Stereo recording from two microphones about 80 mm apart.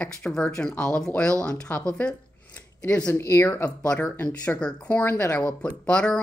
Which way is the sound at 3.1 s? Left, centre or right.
Left.